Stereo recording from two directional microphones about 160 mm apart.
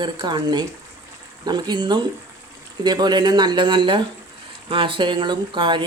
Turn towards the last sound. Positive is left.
turn(degrees=-30)  # may be behind; listen again after turning